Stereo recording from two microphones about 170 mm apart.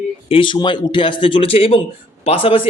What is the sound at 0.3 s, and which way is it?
Speech, 30° left (ahead or behind).